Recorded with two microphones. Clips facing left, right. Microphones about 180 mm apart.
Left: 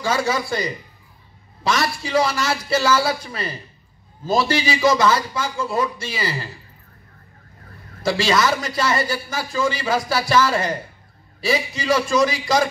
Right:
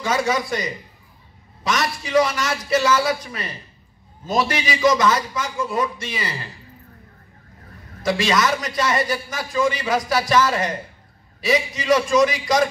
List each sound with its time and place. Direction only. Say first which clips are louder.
0.0 s a man's voice: even; 30° left (ahead or behind)
8.0 s a man's voice: left 1 dB; 30° left (ahead or behind)